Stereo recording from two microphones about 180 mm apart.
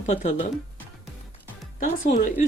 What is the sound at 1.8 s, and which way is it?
Speech, 45° left (ahead or behind).